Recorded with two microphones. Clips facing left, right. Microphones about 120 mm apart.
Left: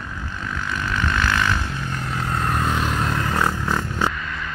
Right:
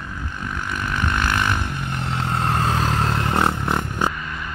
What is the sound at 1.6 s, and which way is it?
Vehicle, 55° right (ahead or behind).